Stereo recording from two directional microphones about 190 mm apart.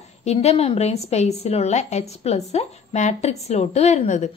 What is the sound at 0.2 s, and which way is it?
A woman's voice, 35° left (ahead or behind).